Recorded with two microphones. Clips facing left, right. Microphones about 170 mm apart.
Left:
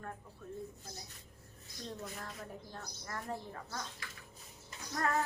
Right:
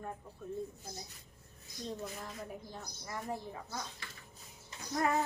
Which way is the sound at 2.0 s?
5° right (ahead or behind).